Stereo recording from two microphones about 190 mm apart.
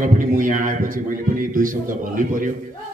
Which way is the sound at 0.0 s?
45° right (ahead or behind).